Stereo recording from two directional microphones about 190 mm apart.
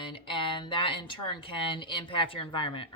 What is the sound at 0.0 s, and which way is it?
Speech, 25° left (ahead or behind).